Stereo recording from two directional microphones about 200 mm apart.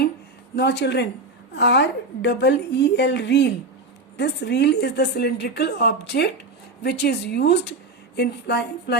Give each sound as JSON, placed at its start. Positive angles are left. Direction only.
{"t": 0.5, "sound": "a woman's voice", "side_deg": 60}